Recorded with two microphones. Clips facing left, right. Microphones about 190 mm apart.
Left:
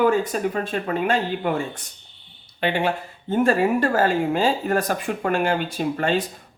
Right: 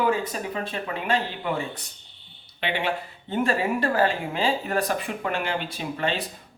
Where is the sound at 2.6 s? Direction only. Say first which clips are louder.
Left 5 dB; 45° left (ahead or behind).